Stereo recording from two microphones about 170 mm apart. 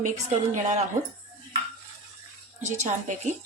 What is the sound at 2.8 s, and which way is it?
Speech, 45° right (ahead or behind).